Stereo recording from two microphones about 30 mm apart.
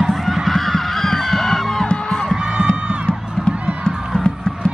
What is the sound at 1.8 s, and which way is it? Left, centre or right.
Music, left.